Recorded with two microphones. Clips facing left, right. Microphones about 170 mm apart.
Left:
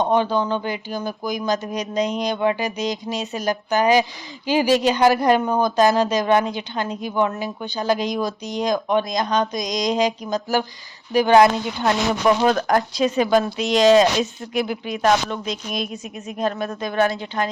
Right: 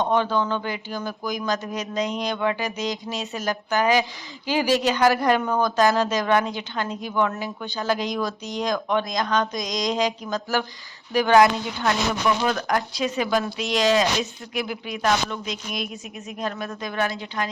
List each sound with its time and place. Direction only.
0.0 s speech: 15° left (ahead or behind)
12.4 s speech: 45° left (ahead or behind)
13.4 s speech: 25° left (ahead or behind)